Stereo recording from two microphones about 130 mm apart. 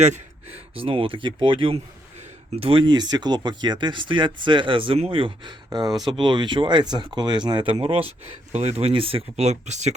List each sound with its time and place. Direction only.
0.8 s speech: 45° right (ahead or behind); by 9.9 s 60° right (ahead or behind)